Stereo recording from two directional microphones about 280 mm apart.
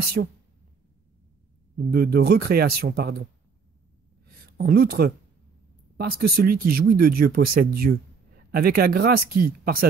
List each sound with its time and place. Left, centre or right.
0.0 s speech: right
1.8 s speech: right
4.3 s a sound: right
5.9 s speech: right